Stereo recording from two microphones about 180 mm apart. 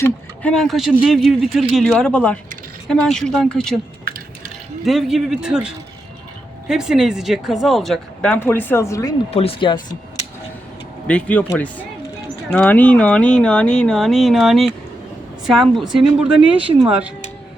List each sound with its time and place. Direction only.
0.0 s speech: 5° left (ahead or behind)
4.0 s drip: 55° right (ahead or behind)
4.8 s speech: centre (ahead or behind); by 9.1 s 15° left (ahead or behind)
9.3 s speech: 35° left (ahead or behind)
11.0 s speech: 5° left (ahead or behind)
16.6 s speech: 30° right (ahead or behind)